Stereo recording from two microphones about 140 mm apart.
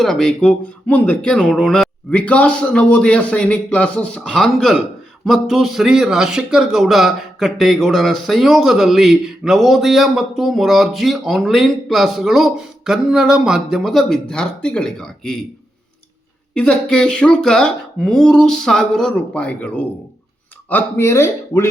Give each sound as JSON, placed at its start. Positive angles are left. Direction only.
{"t": 0.0, "sound": "speech", "side_deg": 5}
{"t": 16.6, "sound": "speech", "side_deg": 5}